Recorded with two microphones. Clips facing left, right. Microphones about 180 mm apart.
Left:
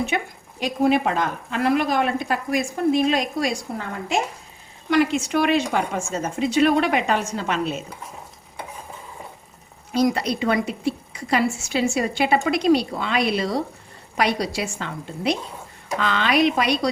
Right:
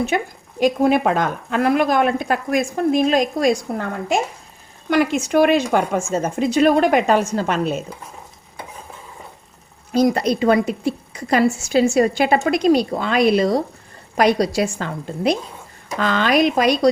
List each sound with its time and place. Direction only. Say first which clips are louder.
0.1 s a woman's voice: right 4 dB; 40° right (ahead or behind)
9.9 s a woman's voice: right 4 dB; 45° right (ahead or behind)